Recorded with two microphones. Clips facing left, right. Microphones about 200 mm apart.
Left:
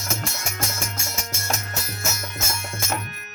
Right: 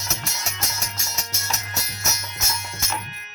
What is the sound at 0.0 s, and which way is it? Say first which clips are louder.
Music: left 3 dB; 50° left (ahead or behind).